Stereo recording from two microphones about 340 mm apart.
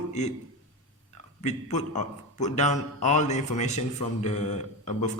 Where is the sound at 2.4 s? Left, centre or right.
Centre.